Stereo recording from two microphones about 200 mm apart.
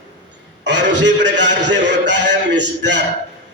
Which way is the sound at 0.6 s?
60° right (ahead or behind).